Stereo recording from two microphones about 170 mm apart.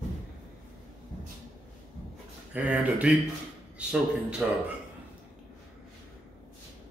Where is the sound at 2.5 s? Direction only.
10° right (ahead or behind).